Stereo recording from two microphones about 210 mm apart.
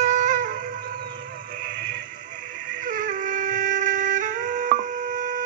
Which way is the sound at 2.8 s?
40° right (ahead or behind).